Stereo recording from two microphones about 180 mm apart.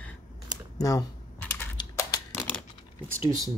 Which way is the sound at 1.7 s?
20° left (ahead or behind).